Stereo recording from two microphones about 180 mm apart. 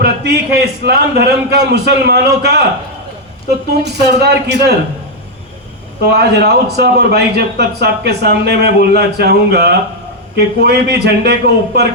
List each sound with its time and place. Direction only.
0.0 s a man's voice: 65° right (ahead or behind)
3.8 s a man's voice: 65° right (ahead or behind)
6.1 s a man's voice: 65° right (ahead or behind)